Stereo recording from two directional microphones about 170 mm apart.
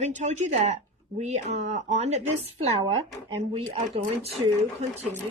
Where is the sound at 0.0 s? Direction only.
40° right (ahead or behind).